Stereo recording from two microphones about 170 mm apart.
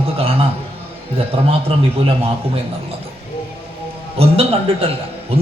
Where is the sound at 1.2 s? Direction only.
35° right (ahead or behind).